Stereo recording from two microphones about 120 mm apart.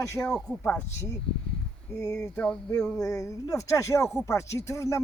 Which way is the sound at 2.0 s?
20° left (ahead or behind).